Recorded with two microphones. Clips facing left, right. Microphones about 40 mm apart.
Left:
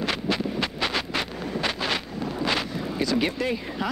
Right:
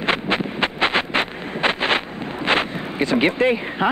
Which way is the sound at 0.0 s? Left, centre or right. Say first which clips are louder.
Right 5 dB; right.